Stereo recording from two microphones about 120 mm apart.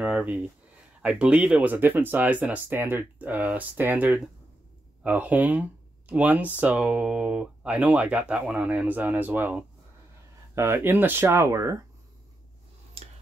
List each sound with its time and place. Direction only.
0.0 s speech: 10° right (ahead or behind)